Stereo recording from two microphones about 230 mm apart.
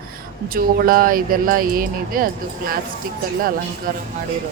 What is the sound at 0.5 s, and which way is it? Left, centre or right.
Speech, right.